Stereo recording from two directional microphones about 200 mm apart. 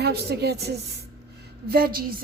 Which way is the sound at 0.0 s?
55° right (ahead or behind).